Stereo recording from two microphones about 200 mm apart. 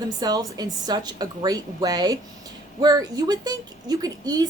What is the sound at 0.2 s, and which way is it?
A woman's voice, 20° right (ahead or behind).